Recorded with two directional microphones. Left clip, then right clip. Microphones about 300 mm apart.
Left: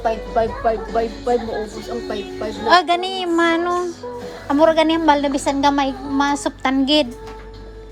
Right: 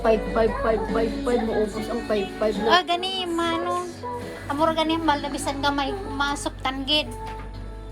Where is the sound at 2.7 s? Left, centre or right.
Left.